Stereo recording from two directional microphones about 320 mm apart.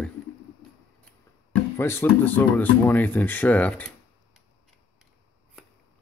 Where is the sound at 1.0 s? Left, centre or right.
Centre.